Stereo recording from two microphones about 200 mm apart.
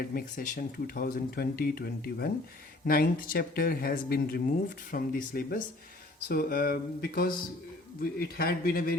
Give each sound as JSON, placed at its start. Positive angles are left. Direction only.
{"t": 0.1, "sound": "speech", "side_deg": 40}